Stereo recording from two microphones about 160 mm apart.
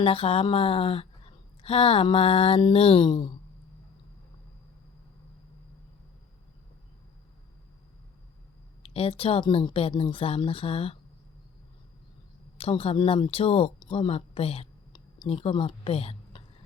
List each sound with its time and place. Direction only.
0.0 s speech: 35° left (ahead or behind)
8.8 s speech: 35° left (ahead or behind)
12.5 s speech: 35° left (ahead or behind)